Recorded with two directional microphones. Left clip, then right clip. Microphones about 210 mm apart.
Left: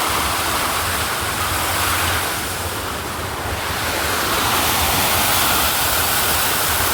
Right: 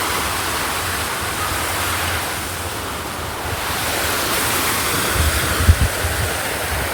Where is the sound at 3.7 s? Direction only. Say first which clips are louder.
Right 1 dB; 50° right (ahead or behind).